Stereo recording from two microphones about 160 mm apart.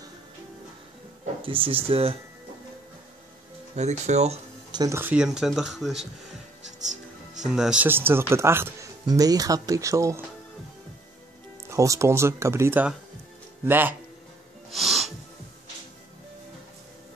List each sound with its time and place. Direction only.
1.4 s speech: 35° right (ahead or behind)
3.7 s speech: 45° right (ahead or behind)
4.6 s speech: 25° right (ahead or behind)
4.9 s speech: 10° right (ahead or behind)
7.5 s speech: 5° right (ahead or behind)
11.7 s speech: 20° right (ahead or behind)
14.7 s music: centre (ahead or behind)